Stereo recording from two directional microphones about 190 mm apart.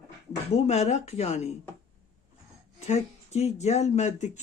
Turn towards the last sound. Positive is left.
turn(degrees=35)  # may be behind; listen again after turning